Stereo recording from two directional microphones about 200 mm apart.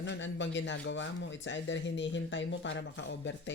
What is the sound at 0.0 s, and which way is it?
Speech, 65° left (ahead or behind).